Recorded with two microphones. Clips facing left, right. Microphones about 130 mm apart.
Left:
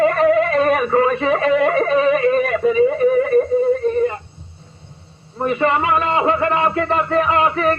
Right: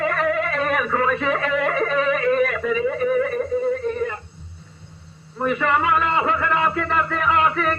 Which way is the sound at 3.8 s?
25° left (ahead or behind).